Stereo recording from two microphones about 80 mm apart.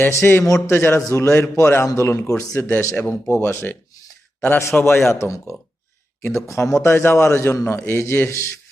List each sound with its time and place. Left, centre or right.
0.1 s a man's voice: left
2.6 s a man's voice: left
5.1 s a man's voice: left